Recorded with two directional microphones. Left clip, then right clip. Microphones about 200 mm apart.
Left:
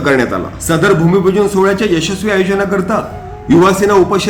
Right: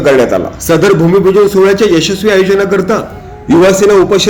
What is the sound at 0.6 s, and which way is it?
A man's voice, 15° right (ahead or behind).